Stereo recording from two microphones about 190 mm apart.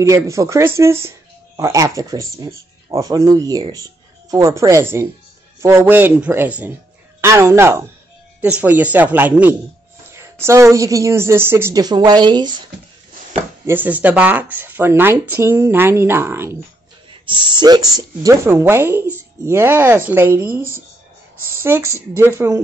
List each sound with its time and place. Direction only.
0.0 s speech: 15° right (ahead or behind)
13.7 s speech: 10° right (ahead or behind)
17.3 s speech: 25° right (ahead or behind)
21.6 s speech: 15° right (ahead or behind)